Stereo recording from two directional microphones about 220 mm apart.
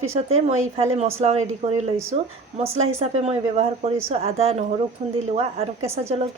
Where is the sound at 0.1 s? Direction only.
30° right (ahead or behind).